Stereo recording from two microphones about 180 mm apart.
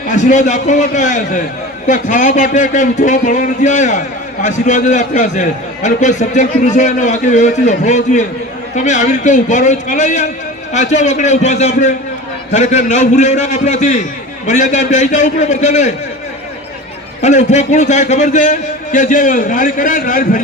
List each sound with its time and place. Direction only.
0.1 s a man's voice: 45° left (ahead or behind)
17.2 s a man's voice: 40° left (ahead or behind)